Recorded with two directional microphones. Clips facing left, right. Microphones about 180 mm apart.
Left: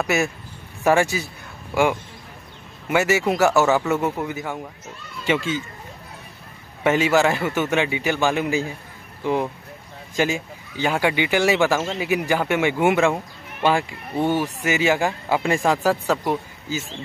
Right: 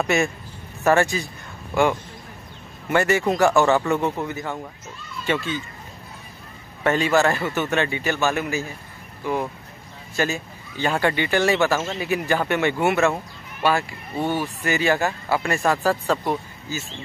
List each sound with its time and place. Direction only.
0.0 s a man's voice: 5° left (ahead or behind)
6.8 s speech: 10° left (ahead or behind)